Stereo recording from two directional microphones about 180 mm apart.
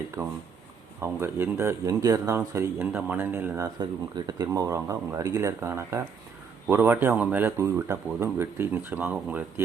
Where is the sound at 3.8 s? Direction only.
25° right (ahead or behind).